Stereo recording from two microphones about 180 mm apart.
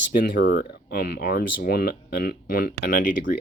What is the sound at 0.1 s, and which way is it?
Speech, 50° left (ahead or behind).